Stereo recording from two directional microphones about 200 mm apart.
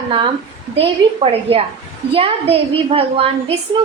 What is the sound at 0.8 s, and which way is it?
A woman's voice, 30° right (ahead or behind).